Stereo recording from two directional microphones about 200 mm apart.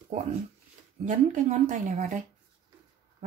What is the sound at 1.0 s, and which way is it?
Speech, 40° right (ahead or behind).